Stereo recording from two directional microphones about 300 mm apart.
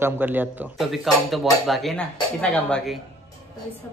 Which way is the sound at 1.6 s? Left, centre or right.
Centre.